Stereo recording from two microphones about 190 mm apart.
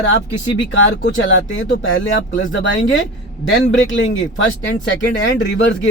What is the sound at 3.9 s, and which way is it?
Speech, 85° left.